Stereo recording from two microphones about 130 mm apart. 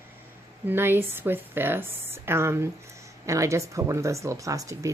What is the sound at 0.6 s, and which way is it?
Speech, 15° right (ahead or behind).